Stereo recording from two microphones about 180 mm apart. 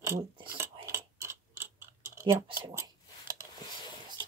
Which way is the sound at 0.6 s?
15° right (ahead or behind).